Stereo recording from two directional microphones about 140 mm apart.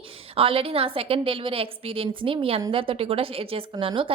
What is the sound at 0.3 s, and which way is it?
A woman's voice, 40° right (ahead or behind).